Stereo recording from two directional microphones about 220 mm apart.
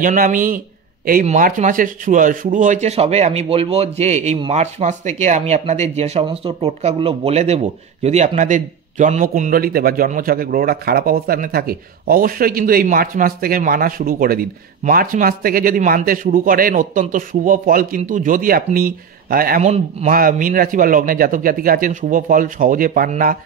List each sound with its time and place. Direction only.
0.0 s speech: 35° right (ahead or behind)